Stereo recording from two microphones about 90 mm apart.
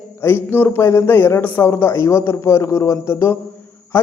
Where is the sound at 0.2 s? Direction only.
25° left (ahead or behind).